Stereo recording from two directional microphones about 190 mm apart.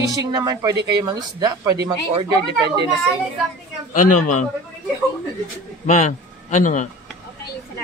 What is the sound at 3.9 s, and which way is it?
Speech, 40° left (ahead or behind).